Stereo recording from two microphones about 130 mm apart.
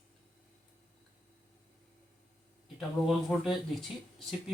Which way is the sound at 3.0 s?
Centre (ahead or behind).